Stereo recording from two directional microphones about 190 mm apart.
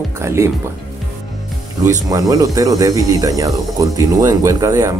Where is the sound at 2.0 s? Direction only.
20° right (ahead or behind).